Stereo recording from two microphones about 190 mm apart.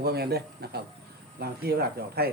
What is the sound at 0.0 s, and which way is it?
Speech, 55° right (ahead or behind).